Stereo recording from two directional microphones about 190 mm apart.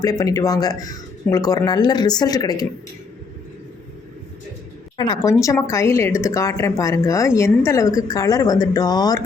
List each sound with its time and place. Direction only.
0.0 s speech: 20° left (ahead or behind)
4.9 s speech: 20° left (ahead or behind)